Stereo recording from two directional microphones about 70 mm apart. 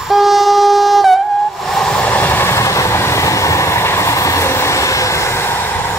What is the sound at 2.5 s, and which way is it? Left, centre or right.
Train, left.